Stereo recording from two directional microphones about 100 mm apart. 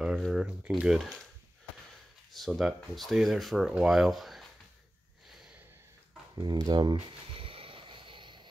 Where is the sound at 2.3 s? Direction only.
Centre (ahead or behind).